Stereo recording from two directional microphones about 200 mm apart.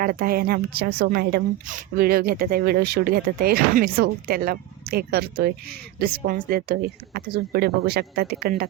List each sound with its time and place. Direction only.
0.0 s a woman's voice: 45° right (ahead or behind)